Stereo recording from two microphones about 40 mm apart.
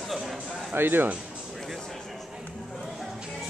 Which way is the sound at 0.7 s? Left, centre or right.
Right.